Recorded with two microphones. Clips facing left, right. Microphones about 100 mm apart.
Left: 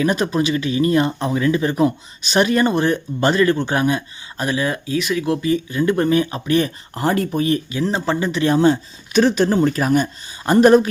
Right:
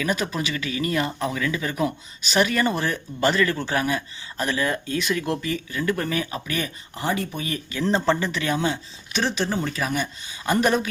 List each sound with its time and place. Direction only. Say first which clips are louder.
0.0 s speech: left 7 dB; 30° left (ahead or behind); by 5.4 s 5° left (ahead or behind)
5.4 s speech: left 9 dB; 20° left (ahead or behind)
6.9 s speech: left 7 dB; 45° left (ahead or behind)
7.9 s speech: right 1 dB; 5° left (ahead or behind)
8.2 s speech: left 7 dB; 20° left (ahead or behind)
8.4 s speech: left 12 dB; 40° left (ahead or behind)